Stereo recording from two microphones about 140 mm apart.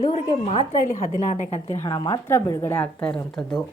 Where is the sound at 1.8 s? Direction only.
35° left (ahead or behind).